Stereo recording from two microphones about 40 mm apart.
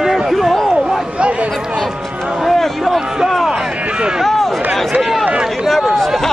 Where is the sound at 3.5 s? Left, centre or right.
Centre.